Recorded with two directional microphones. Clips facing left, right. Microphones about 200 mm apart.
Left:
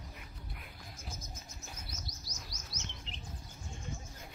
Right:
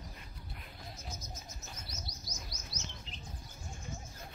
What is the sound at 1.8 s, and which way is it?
Chirp, 55° left (ahead or behind).